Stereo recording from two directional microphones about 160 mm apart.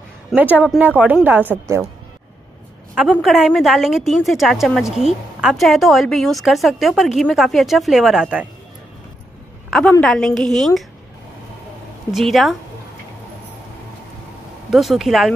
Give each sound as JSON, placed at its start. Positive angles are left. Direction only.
{"t": 0.4, "sound": "speech", "side_deg": -10}
{"t": 2.9, "sound": "a woman's voice", "side_deg": -5}
{"t": 9.7, "sound": "a woman's voice", "side_deg": 5}
{"t": 12.1, "sound": "a woman's voice", "side_deg": 0}
{"t": 14.7, "sound": "a woman's voice", "side_deg": 0}